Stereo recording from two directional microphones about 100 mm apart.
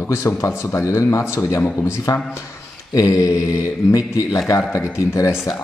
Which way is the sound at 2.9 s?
35° left (ahead or behind).